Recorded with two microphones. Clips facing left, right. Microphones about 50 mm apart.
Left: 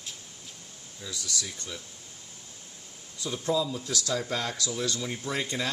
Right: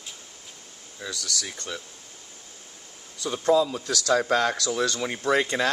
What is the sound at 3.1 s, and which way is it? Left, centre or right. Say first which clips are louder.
Speech: right 7 dB; right.